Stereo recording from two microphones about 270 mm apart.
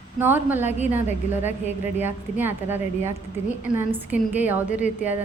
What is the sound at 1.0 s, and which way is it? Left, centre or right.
Speech, left.